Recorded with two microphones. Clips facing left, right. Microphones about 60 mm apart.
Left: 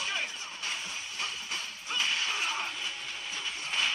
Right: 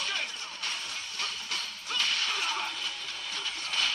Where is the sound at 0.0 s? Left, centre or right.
Centre.